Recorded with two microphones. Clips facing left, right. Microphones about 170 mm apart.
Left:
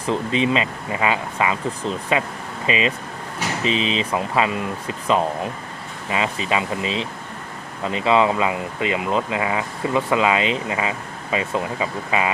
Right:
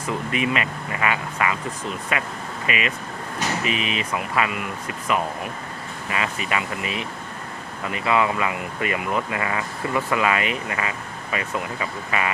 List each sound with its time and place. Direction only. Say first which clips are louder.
0.0 s speech: left 4 dB; 25° left (ahead or behind)